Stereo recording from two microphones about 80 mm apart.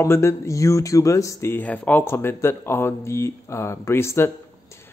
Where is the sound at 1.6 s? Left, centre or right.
Left.